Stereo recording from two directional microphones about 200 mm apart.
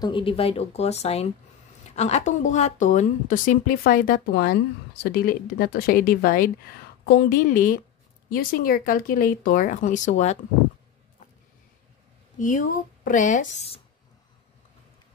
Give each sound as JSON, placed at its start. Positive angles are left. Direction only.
{"t": 0.0, "sound": "a woman's voice", "side_deg": 25}
{"t": 12.4, "sound": "a woman's voice", "side_deg": 40}